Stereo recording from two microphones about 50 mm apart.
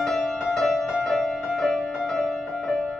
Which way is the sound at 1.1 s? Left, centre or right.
Centre.